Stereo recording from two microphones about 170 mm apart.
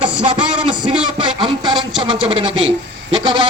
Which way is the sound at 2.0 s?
35° right (ahead or behind).